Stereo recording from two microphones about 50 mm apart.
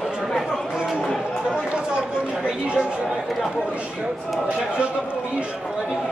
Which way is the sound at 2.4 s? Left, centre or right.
Centre.